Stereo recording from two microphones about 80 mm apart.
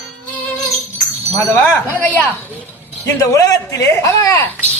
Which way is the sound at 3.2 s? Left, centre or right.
Left.